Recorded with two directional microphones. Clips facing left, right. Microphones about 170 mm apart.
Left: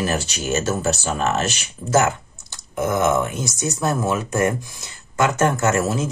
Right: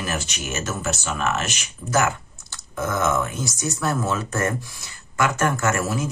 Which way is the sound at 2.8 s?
20° left (ahead or behind).